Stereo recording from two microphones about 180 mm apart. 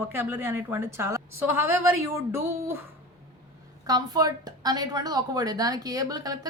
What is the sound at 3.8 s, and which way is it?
A woman's voice, 20° right (ahead or behind).